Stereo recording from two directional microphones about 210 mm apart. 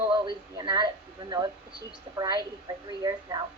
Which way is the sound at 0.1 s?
20° right (ahead or behind).